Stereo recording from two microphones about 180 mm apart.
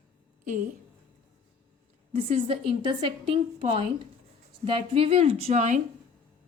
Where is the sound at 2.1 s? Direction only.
35° right (ahead or behind).